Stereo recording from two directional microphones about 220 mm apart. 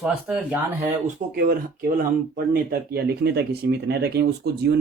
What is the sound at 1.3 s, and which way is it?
Speech, 40° right (ahead or behind).